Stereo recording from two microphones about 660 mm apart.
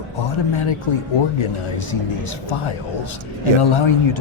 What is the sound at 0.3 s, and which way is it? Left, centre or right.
Speech, left.